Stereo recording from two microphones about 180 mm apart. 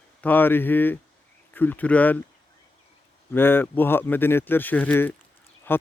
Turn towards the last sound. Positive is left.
turn(degrees=10)  # may be behind; listen again after turning